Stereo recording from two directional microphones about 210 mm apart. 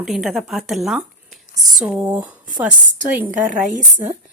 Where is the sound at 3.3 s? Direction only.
35° right (ahead or behind).